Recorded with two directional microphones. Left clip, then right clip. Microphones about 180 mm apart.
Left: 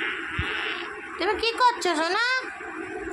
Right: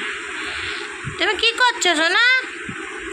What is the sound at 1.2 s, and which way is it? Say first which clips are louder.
A woman's voice: right 5 dB; 5° right (ahead or behind).